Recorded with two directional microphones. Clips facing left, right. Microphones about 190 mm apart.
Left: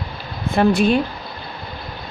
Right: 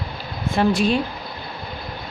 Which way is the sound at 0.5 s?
60° left (ahead or behind).